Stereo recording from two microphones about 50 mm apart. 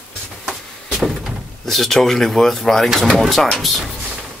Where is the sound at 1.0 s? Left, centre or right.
Centre.